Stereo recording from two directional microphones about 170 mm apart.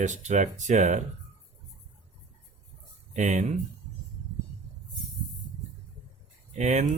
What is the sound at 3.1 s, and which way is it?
Speech, 45° right (ahead or behind).